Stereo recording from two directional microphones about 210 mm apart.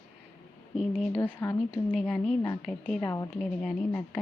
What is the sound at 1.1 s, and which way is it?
Speech, 10° left (ahead or behind).